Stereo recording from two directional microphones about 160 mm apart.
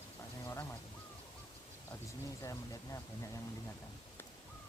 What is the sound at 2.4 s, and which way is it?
Speech, 20° left (ahead or behind).